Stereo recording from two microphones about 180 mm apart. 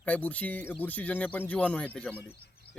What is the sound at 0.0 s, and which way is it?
Speech, 10° left (ahead or behind).